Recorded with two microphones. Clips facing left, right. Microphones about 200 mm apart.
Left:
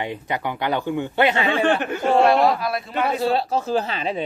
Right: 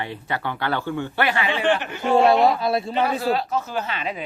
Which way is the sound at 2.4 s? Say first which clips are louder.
Right 1 dB; 25° right (ahead or behind).